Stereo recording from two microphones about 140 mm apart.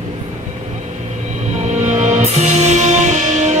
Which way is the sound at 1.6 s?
55° right (ahead or behind).